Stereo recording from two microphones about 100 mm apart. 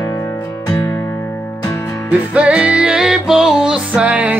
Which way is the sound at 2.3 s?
10° right (ahead or behind).